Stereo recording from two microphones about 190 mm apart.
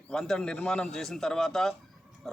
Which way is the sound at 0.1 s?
5° left (ahead or behind).